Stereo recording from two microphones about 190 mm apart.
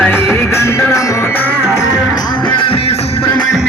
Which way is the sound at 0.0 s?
10° left (ahead or behind).